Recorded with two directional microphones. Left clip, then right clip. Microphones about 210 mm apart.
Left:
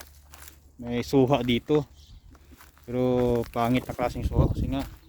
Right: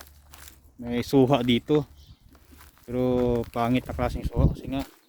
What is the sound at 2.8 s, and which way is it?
Speech, 5° right (ahead or behind).